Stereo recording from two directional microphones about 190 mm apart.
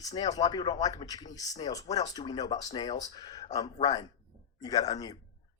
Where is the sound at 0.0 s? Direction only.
20° left (ahead or behind).